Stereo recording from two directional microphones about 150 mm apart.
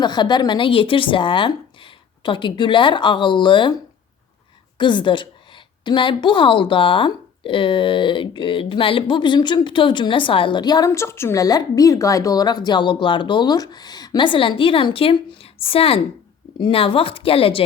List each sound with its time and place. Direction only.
0.0 s speech: 30° left (ahead or behind)
4.8 s speech: 30° left (ahead or behind)